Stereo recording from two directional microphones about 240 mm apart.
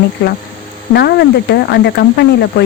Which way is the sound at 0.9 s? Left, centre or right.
Left.